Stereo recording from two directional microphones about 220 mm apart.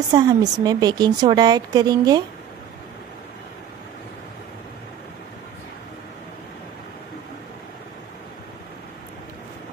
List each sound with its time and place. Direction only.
0.1 s a woman's voice: 20° right (ahead or behind)